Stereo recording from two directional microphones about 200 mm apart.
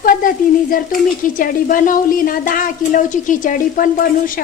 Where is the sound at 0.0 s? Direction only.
45° left (ahead or behind).